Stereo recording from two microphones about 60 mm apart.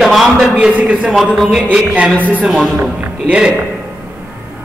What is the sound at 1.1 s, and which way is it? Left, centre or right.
Speech, centre.